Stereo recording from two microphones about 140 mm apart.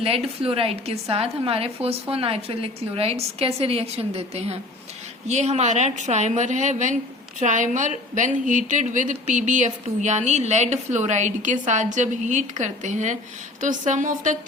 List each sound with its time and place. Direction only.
0.4 s a woman's voice: 45° right (ahead or behind); by 14.3 s 65° right (ahead or behind)